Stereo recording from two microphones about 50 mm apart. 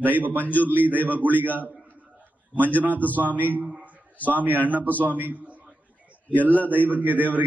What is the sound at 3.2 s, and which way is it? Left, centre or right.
A man's voice, right.